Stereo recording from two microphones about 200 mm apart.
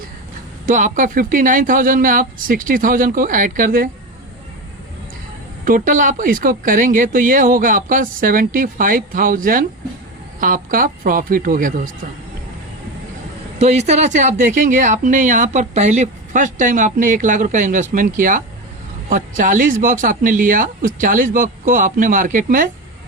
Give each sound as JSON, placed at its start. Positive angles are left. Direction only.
{"t": 0.6, "sound": "speech", "side_deg": -40}
{"t": 5.6, "sound": "speech", "side_deg": -40}
{"t": 13.6, "sound": "a woman's voice", "side_deg": -35}